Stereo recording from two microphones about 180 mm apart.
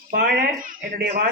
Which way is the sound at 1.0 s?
60° right (ahead or behind).